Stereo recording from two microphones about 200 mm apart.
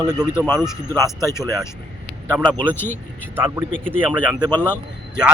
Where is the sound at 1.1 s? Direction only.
15° left (ahead or behind).